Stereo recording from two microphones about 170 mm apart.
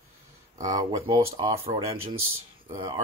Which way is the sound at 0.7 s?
20° right (ahead or behind).